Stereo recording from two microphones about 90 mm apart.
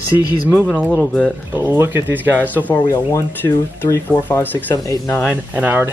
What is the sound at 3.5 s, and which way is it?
Speech, 35° left (ahead or behind).